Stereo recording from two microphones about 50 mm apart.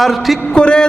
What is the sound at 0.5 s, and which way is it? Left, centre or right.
Speech, centre.